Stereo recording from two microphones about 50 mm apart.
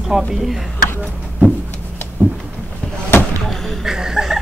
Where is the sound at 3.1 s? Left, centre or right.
Left.